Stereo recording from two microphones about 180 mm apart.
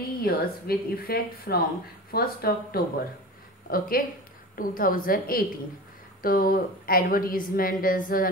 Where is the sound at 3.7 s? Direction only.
55° left (ahead or behind).